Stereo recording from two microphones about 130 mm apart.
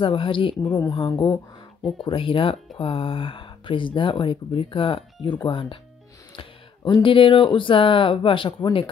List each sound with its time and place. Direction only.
0.0 s speech: 40° left (ahead or behind)
1.8 s speech: centre (ahead or behind)
2.0 s speech: 40° left (ahead or behind)